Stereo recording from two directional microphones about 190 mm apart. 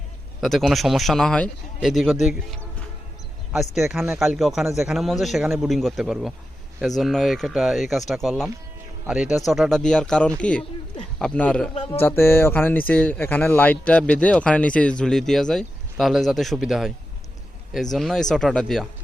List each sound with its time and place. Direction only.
0.4 s a man's voice: centre (ahead or behind)
3.8 s a man's voice: centre (ahead or behind)
11.7 s speech: 30° left (ahead or behind)
11.9 s a man's voice: 10° left (ahead or behind)
17.9 s a man's voice: centre (ahead or behind)